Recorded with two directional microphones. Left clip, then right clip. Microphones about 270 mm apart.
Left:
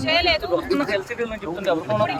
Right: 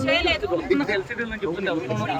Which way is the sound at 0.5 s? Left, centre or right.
Centre.